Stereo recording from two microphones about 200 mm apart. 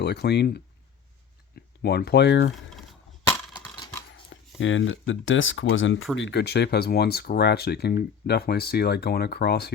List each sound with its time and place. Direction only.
0.0 s speech: 55° left (ahead or behind)
4.3 s speech: 70° left (ahead or behind)
6.1 s speech: 60° left (ahead or behind)